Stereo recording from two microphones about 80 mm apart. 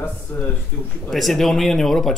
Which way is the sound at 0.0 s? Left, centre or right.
Left.